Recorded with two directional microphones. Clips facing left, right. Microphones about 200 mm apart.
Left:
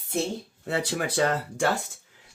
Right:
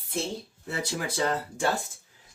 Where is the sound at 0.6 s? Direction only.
65° left (ahead or behind).